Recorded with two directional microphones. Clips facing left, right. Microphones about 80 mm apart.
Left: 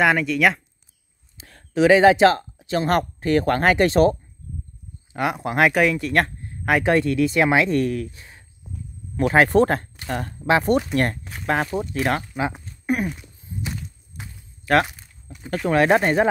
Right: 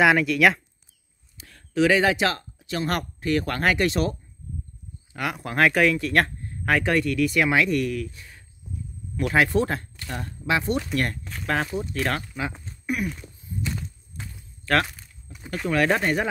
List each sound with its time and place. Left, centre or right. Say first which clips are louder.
0.0 s speech: even; centre
1.4 s speech: left 3 dB; left
5.1 s speech: left 5 dB; left; by 6.5 s centre
6.6 s speech: left 2 dB; centre
6.9 s speech: left 4 dB; left
9.5 s speech: left 6 dB; left
10.4 s speech: left 6 dB; left
11.2 s speech: left 3 dB; centre; by 13.1 s left
13.1 s a sound: even; centre
14.1 s walk: even; centre
15.7 s speech: left 5 dB; left